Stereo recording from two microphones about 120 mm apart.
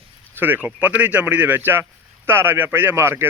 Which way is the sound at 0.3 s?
15° right (ahead or behind).